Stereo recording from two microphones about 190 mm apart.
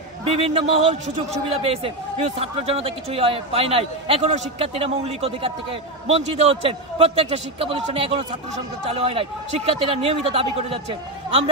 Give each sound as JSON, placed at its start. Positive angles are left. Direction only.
{"t": 0.2, "sound": "speech", "side_deg": -30}